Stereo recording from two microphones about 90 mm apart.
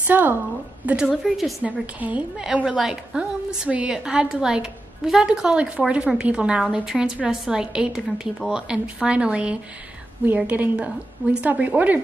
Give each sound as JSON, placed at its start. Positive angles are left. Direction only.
{"t": 0.0, "sound": "a woman's voice", "side_deg": -20}
{"t": 0.8, "sound": "a woman's voice", "side_deg": -5}
{"t": 1.6, "sound": "a woman's voice", "side_deg": -15}